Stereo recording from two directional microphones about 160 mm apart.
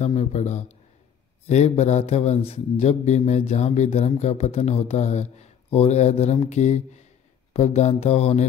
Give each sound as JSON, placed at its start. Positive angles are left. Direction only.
{"t": 0.0, "sound": "a man's voice", "side_deg": 45}